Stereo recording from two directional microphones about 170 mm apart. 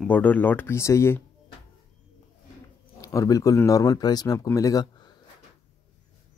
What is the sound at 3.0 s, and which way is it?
Speech, 20° left (ahead or behind).